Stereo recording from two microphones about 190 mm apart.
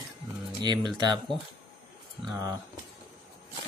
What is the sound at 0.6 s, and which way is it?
Speech, 20° right (ahead or behind).